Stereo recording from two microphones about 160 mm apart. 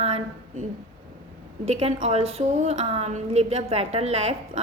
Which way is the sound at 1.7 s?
40° right (ahead or behind).